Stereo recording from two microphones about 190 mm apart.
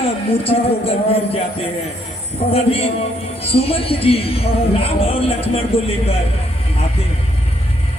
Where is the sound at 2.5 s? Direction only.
30° left (ahead or behind).